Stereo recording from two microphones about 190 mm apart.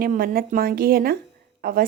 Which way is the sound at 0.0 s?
50° right (ahead or behind).